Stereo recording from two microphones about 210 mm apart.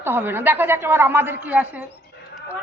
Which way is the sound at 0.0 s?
10° right (ahead or behind).